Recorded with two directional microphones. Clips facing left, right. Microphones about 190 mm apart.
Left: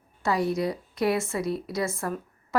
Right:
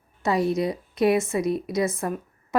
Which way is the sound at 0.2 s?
20° right (ahead or behind).